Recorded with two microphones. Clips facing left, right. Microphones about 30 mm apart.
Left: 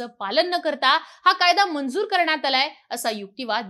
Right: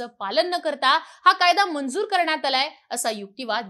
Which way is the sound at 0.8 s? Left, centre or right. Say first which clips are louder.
Right 1 dB; left.